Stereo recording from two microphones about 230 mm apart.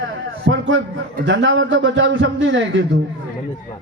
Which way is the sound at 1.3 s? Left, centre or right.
Right.